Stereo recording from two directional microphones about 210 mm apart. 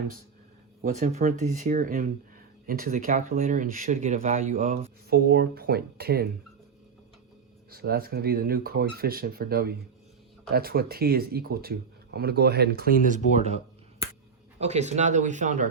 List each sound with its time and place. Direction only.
0.8 s speech: 40° right (ahead or behind)
5.0 s speech: 50° right (ahead or behind)
7.7 s speech: 45° right (ahead or behind)
14.6 s speech: 30° right (ahead or behind)